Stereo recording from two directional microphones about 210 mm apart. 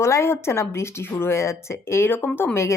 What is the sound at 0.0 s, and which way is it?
Speech, 15° left (ahead or behind).